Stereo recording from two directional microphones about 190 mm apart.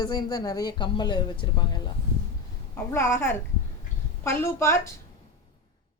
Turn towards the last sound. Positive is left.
turn(degrees=15)  # may be behind; listen again after turning